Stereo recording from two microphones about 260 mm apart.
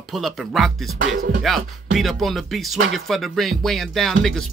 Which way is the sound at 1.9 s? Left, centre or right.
Centre.